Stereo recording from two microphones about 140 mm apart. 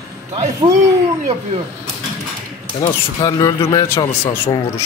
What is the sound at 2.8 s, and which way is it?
Speech, 25° left (ahead or behind).